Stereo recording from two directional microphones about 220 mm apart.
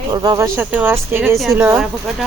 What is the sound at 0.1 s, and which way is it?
Speech, 15° right (ahead or behind).